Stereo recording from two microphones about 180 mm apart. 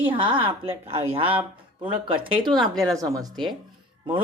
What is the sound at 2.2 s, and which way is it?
Speech, 30° right (ahead or behind).